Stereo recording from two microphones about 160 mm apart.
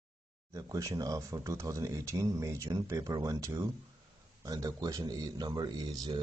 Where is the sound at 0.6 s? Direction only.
20° right (ahead or behind).